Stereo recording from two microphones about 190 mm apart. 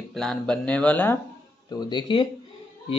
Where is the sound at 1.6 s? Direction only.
20° left (ahead or behind).